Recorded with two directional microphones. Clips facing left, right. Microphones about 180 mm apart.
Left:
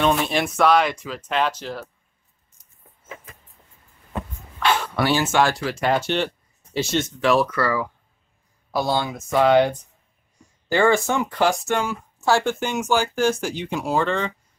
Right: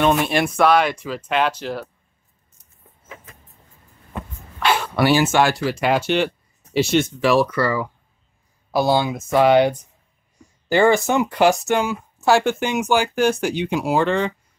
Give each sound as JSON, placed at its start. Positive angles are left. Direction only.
{"t": 0.0, "sound": "speech", "side_deg": -5}
{"t": 4.9, "sound": "speech", "side_deg": -10}
{"t": 6.7, "sound": "speech", "side_deg": -70}
{"t": 7.2, "sound": "speech", "side_deg": -5}
{"t": 8.7, "sound": "speech", "side_deg": -5}